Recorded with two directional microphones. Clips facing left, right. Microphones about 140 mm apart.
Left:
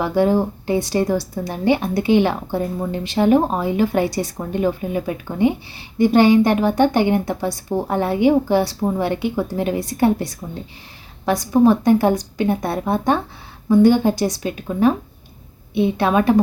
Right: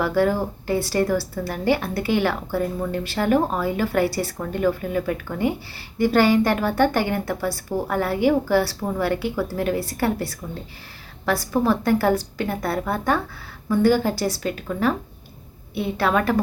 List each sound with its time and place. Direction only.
0.0 s speech: 20° left (ahead or behind)